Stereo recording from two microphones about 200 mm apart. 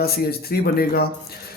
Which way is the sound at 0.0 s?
50° left (ahead or behind).